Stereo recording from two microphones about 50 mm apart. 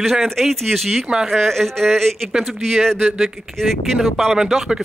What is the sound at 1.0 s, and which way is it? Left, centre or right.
Speech, centre.